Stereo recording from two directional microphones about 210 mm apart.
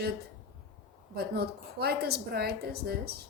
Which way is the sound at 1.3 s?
50° right (ahead or behind).